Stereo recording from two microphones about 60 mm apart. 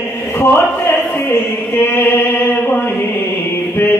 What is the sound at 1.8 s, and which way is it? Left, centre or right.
Chant, left.